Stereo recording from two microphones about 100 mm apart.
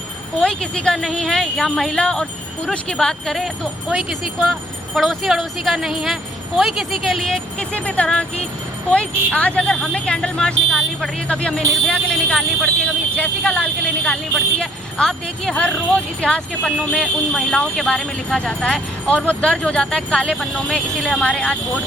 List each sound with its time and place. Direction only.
0.4 s speech: 10° left (ahead or behind)